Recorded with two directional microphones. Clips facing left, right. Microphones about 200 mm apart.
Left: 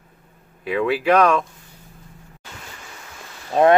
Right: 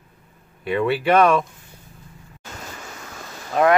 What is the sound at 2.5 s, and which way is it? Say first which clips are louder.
Waves: right 3 dB; 45° right (ahead or behind).